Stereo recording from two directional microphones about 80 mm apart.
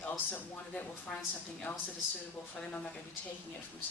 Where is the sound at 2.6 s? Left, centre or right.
Centre.